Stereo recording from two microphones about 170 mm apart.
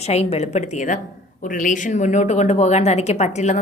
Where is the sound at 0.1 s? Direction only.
40° left (ahead or behind).